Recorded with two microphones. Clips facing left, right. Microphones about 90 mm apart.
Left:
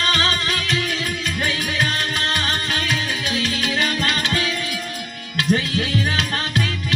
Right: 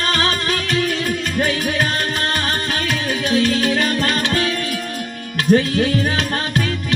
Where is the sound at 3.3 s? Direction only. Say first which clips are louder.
Right 7 dB; 45° right (ahead or behind).